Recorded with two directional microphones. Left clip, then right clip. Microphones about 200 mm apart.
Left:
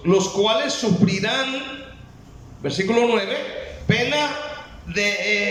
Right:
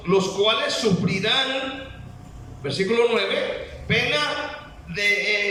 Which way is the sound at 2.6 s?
35° left (ahead or behind).